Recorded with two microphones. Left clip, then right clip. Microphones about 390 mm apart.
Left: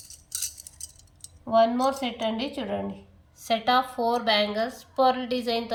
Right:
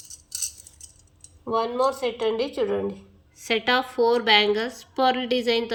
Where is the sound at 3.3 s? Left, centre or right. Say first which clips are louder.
Even; centre.